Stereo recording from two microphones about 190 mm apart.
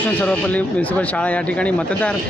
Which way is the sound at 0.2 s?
5° left (ahead or behind).